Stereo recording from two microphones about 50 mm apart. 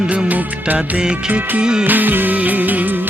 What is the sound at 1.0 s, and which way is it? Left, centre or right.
Music, right.